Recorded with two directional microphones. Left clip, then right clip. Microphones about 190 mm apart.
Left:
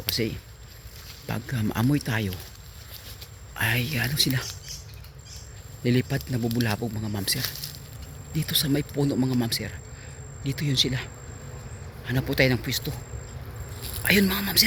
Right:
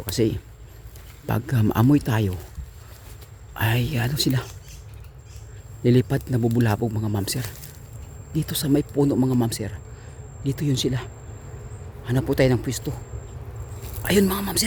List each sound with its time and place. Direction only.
0.1 s speech: 35° right (ahead or behind)
3.5 s speech: 30° right (ahead or behind)
5.8 s speech: 35° right (ahead or behind)